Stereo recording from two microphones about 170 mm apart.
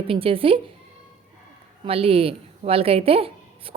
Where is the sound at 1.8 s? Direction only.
35° right (ahead or behind).